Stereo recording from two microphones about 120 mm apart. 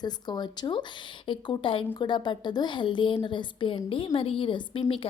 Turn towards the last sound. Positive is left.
turn(degrees=50)  # may be behind; listen again after turning